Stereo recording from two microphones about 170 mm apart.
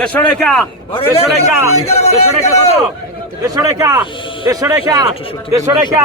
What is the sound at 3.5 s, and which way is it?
A man's voice, 20° right (ahead or behind).